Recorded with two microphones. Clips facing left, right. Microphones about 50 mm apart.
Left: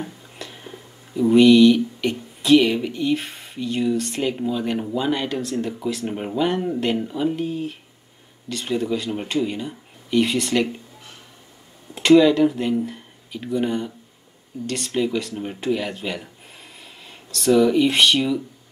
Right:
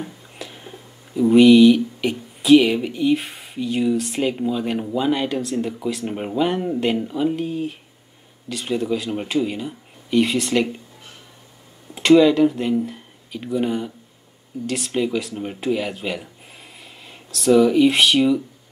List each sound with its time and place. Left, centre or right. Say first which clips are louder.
0.0 s speech: even; centre
11.9 s speech: even; centre